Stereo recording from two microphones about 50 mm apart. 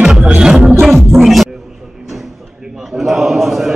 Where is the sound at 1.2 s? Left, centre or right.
Centre.